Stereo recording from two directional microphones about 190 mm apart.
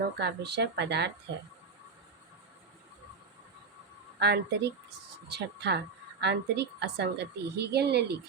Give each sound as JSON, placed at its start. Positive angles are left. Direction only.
{"t": 0.2, "sound": "a woman's voice", "side_deg": -60}
{"t": 4.2, "sound": "a woman's voice", "side_deg": -60}